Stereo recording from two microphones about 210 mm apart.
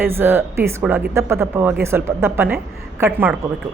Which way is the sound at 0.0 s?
10° right (ahead or behind).